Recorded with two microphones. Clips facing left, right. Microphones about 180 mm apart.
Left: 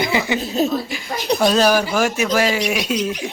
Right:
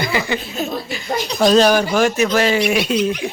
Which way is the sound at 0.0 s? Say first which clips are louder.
Left 1 dB; 20° left (ahead or behind).